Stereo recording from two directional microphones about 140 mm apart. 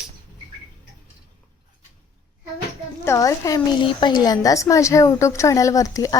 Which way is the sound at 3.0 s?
20° left (ahead or behind).